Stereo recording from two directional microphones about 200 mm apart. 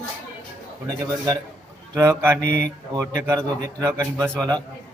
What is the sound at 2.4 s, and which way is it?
Speech, 45° left (ahead or behind).